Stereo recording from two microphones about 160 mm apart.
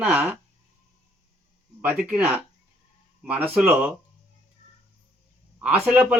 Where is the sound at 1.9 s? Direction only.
10° right (ahead or behind).